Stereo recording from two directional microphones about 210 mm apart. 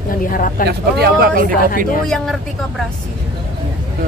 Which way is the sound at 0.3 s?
40° left (ahead or behind).